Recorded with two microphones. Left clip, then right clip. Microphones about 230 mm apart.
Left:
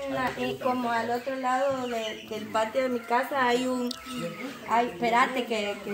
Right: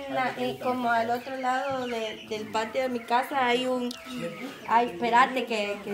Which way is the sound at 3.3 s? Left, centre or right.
Centre.